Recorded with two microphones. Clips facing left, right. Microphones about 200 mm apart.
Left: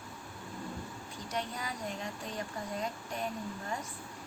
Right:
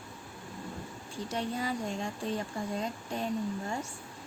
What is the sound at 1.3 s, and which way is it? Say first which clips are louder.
Speech: right 5 dB; 30° right (ahead or behind).